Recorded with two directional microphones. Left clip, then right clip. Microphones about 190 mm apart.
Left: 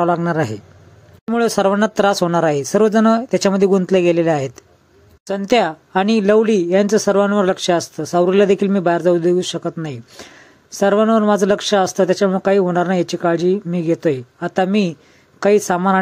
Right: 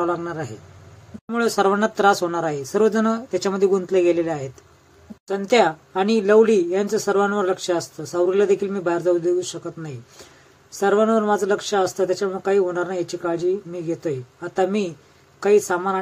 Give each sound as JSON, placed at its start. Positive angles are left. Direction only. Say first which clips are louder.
{"t": 0.0, "sound": "speech", "louder": "left 7 dB", "side_deg": 45}